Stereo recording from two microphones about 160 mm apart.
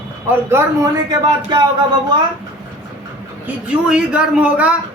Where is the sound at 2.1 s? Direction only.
30° right (ahead or behind).